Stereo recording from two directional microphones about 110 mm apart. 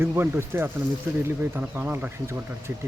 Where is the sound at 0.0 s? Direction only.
20° right (ahead or behind).